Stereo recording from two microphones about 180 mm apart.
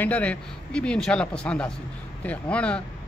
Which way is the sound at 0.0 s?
10° left (ahead or behind).